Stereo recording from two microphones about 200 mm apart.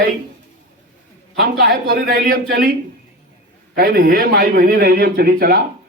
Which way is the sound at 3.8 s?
50° right (ahead or behind).